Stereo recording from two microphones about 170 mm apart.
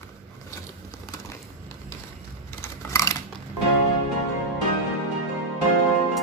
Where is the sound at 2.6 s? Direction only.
20° left (ahead or behind).